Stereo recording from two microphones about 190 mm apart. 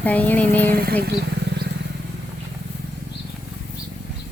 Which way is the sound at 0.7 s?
55° right (ahead or behind).